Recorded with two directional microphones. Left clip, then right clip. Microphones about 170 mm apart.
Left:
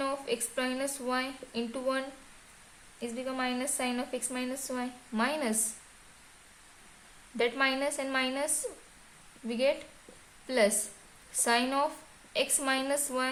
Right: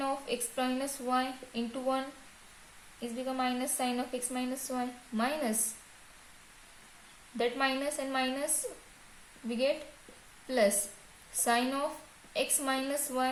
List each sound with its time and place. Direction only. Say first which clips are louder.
0.0 s speech: left 1 dB; 45° left (ahead or behind)
3.0 s speech: even; 40° left (ahead or behind)
7.3 s speech: left 2 dB; 40° left (ahead or behind)
9.5 s speech: left 2 dB; 40° left (ahead or behind)
11.4 s speech: left 2 dB; 45° left (ahead or behind)